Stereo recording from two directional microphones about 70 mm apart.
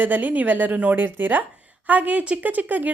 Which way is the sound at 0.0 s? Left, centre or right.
Right.